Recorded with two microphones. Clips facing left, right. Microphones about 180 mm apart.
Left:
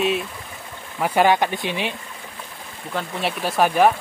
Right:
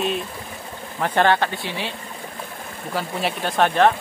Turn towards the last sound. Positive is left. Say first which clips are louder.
# even
turn(degrees=10)  # may be behind; listen again after turning